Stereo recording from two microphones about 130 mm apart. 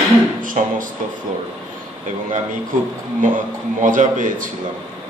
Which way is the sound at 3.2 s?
90° right.